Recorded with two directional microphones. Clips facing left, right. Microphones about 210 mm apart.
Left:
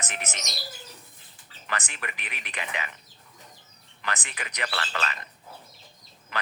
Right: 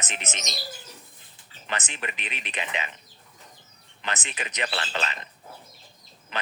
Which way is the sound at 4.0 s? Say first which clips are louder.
Right 1 dB; 20° right (ahead or behind).